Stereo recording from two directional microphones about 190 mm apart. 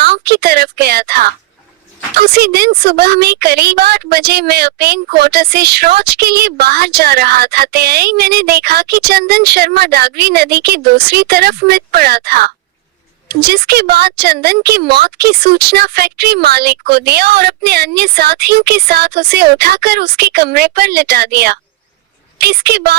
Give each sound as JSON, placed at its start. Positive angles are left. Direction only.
{"t": 0.0, "sound": "a woman's voice", "side_deg": -55}